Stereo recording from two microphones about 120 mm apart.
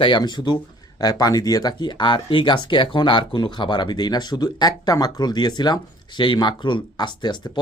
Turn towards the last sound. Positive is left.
turn(degrees=40)  # may be behind; listen again after turning